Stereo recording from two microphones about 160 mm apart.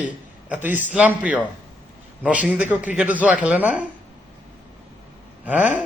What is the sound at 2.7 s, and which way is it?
A man's voice, 10° right (ahead or behind).